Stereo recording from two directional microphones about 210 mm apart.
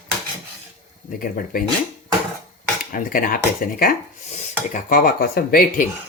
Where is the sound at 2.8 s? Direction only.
45° left (ahead or behind).